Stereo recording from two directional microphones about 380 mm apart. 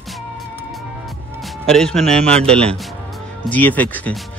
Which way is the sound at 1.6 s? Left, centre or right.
Centre.